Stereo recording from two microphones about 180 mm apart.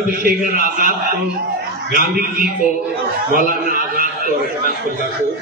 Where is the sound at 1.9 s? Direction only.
55° right (ahead or behind).